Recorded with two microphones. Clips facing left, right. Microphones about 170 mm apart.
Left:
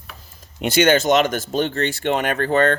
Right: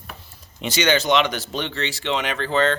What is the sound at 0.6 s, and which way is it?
Speech, 55° left (ahead or behind).